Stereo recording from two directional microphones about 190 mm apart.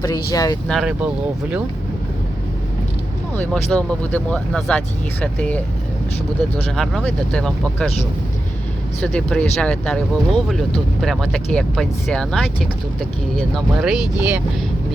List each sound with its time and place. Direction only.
0.0 s speech: 20° left (ahead or behind)
0.7 s speech: 5° right (ahead or behind)
3.3 s speech: 5° left (ahead or behind)
6.7 s speech: centre (ahead or behind)
9.0 s speech: 5° left (ahead or behind)
13.8 s speech: 5° right (ahead or behind)